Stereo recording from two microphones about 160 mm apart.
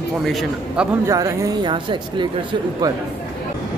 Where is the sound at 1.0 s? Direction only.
20° right (ahead or behind).